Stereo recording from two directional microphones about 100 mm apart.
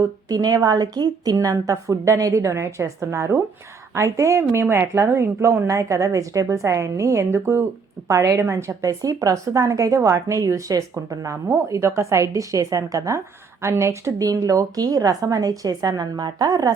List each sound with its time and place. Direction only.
0.3 s a woman's voice: 40° right (ahead or behind)